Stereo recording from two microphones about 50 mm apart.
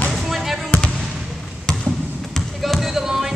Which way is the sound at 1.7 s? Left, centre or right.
Centre.